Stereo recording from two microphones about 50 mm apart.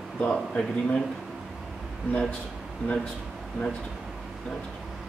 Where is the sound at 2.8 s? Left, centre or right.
Right.